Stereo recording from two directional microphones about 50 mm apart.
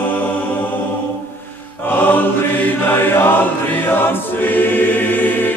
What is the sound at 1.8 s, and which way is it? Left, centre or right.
Chant, left.